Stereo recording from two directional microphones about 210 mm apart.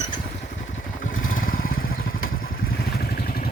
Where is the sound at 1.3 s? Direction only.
40° left (ahead or behind).